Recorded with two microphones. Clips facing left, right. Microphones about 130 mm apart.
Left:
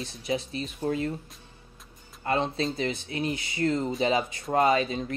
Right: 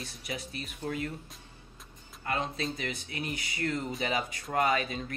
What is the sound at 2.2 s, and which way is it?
Speech, 30° left (ahead or behind).